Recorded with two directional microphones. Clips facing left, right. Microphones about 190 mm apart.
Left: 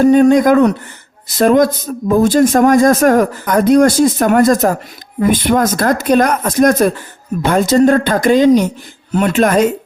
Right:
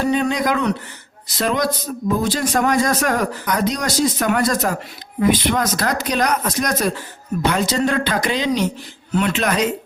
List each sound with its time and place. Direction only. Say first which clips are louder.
0.0 s a man's voice: left 11 dB; 45° left (ahead or behind)